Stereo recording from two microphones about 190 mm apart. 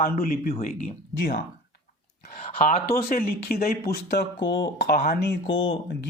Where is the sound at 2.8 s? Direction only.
50° left (ahead or behind); by 5.7 s 70° left (ahead or behind).